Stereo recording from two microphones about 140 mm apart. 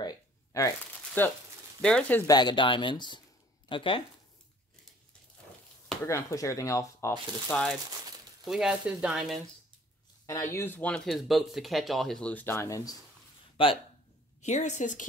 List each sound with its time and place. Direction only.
0.0 s shuffling cards: 25° left (ahead or behind)
1.2 s speech: 15° left (ahead or behind)
2.2 s speech: 30° left (ahead or behind)
6.0 s speech: 20° left (ahead or behind)
8.5 s speech: 5° right (ahead or behind)
10.2 s speech: 25° left (ahead or behind)
13.6 s speech: 40° left (ahead or behind)
14.4 s a woman's voice: 55° left (ahead or behind)